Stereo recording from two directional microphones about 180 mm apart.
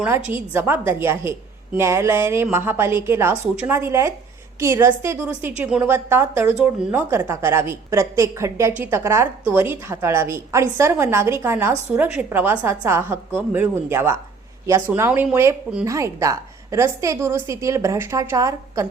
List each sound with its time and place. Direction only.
0.3 s a woman's voice: 10° right (ahead or behind)